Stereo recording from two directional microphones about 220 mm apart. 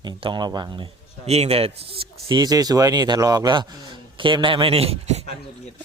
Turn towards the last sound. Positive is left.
turn(degrees=-30)  # may be behind; listen again after turning